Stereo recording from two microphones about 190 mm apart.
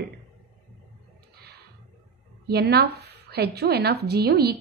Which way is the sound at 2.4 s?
55° right (ahead or behind).